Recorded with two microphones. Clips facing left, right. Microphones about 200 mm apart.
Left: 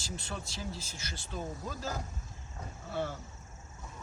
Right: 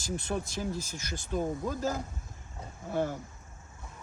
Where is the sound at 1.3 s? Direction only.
50° right (ahead or behind).